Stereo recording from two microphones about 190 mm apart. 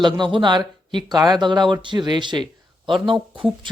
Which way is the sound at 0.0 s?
25° right (ahead or behind).